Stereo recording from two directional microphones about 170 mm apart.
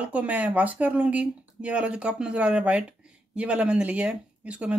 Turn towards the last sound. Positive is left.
turn(degrees=-5)  # may be behind; listen again after turning